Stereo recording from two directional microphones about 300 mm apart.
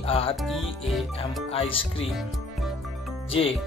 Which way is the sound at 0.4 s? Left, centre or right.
Centre.